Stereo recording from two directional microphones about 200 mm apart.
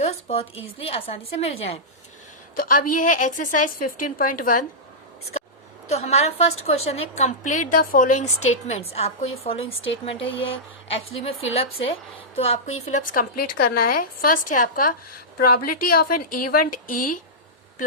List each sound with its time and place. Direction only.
0.0 s a sound: 30° left (ahead or behind)
0.8 s a woman's voice: 30° left (ahead or behind)
2.6 s a woman's voice: 40° left (ahead or behind)
5.9 s a woman's voice: 30° left (ahead or behind)